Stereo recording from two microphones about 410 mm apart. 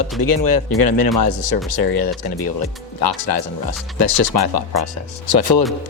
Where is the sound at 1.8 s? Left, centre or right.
Left.